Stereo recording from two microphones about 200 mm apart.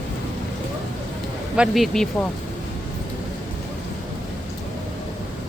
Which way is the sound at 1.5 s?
Centre (ahead or behind).